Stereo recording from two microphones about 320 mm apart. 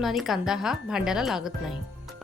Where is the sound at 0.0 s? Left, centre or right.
Centre.